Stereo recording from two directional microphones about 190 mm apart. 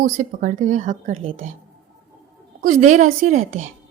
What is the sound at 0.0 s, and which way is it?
Speech, 45° right (ahead or behind).